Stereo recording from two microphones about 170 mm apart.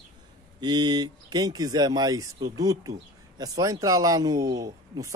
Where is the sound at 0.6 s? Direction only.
25° right (ahead or behind).